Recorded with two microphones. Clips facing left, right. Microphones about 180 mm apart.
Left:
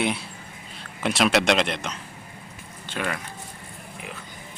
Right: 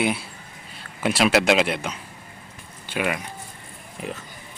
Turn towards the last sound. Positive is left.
turn(degrees=-35)  # may be behind; listen again after turning